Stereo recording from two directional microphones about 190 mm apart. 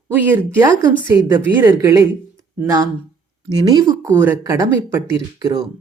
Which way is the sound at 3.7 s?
20° right (ahead or behind).